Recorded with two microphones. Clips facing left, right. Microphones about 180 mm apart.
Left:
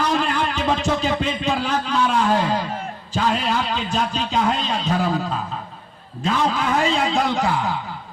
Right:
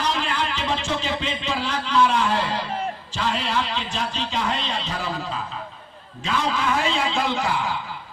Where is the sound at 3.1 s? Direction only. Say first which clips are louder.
Left 5 dB; 45° left (ahead or behind).